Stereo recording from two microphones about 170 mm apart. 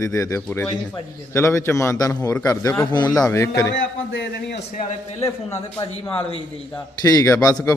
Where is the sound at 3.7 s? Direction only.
90° left.